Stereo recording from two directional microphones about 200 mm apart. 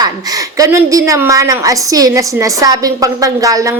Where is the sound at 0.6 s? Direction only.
15° right (ahead or behind).